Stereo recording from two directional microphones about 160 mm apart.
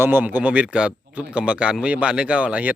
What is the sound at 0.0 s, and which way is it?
Speech, 10° right (ahead or behind).